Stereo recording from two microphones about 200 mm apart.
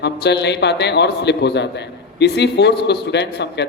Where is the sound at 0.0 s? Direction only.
60° left (ahead or behind).